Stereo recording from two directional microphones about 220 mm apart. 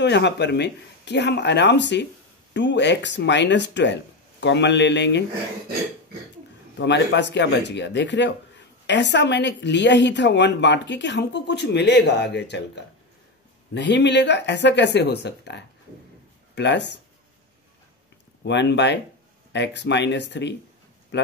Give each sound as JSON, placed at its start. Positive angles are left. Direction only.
{"t": 0.0, "sound": "a woman's voice", "side_deg": 50}
{"t": 6.8, "sound": "a woman's voice", "side_deg": 50}
{"t": 18.4, "sound": "a woman's voice", "side_deg": 50}